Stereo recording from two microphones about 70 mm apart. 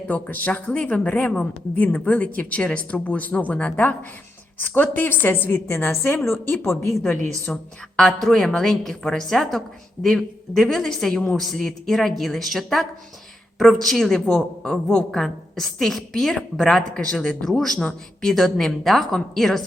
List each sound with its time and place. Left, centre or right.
0.1 s a woman's voice: left
7.4 s a woman's voice: centre